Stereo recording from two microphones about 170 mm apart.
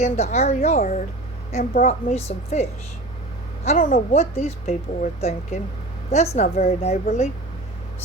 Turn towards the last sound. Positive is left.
turn(degrees=40)  # may be behind; listen again after turning